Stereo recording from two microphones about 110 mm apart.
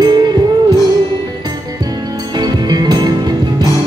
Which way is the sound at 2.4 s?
40° right (ahead or behind).